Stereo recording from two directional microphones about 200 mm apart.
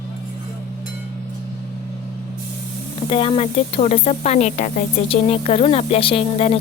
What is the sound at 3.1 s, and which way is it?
Speech, 30° left (ahead or behind).